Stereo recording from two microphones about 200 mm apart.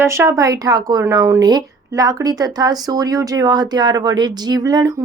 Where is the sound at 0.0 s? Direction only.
15° right (ahead or behind).